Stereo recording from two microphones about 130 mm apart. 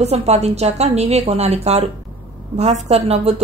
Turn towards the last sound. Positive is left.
turn(degrees=-50)  # may be behind; listen again after turning